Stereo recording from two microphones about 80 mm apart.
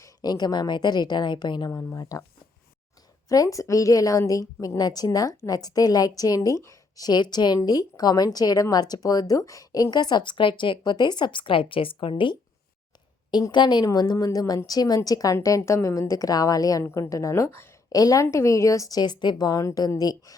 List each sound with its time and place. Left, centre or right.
0.0 s a woman's voice: left
1.8 s a woman's voice: left
3.2 s a woman's voice: left
7.0 s a woman's voice: left
13.5 s a woman's voice: left